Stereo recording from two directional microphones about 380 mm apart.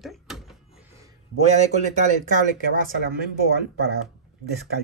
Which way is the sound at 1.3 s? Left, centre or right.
Centre.